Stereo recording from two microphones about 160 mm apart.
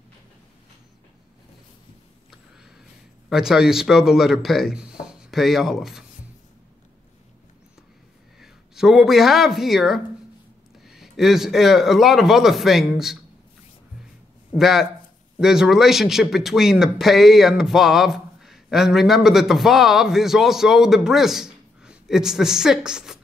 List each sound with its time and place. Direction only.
3.3 s speech: 5° right (ahead or behind)
8.4 s speech: centre (ahead or behind)
14.5 s speech: centre (ahead or behind)